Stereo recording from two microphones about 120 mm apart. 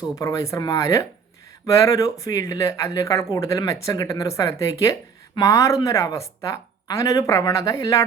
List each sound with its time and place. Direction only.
0.2 s speech: 25° left (ahead or behind)